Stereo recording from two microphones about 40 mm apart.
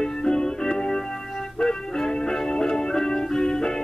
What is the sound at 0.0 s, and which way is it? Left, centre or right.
Music, centre.